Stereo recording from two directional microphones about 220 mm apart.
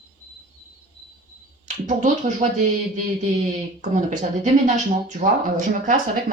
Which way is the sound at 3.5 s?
35° right (ahead or behind).